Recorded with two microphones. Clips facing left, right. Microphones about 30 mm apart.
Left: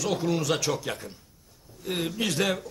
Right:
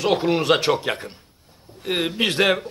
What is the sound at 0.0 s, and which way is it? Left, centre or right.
A man's voice, right.